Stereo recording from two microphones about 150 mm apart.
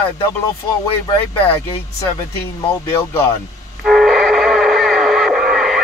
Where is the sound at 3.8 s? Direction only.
Centre (ahead or behind).